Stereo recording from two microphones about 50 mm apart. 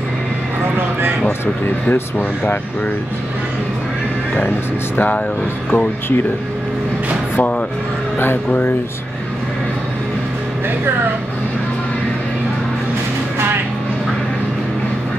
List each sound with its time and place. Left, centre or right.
1.9 s speech: left
4.9 s speech: left